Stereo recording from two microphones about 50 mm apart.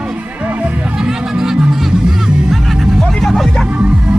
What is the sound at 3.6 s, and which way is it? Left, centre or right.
Music, right.